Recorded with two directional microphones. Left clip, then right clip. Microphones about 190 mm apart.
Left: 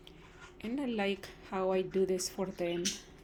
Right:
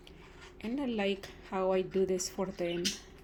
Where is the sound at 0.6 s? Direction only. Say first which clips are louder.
Right 1 dB; centre (ahead or behind).